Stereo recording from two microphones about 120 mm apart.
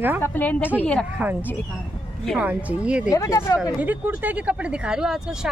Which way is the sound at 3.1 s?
25° left (ahead or behind).